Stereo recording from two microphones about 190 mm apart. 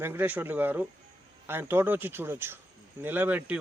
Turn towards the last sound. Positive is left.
turn(degrees=-10)  # may be behind; listen again after turning